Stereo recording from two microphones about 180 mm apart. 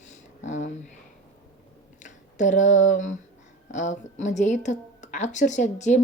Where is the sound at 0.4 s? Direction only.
40° left (ahead or behind).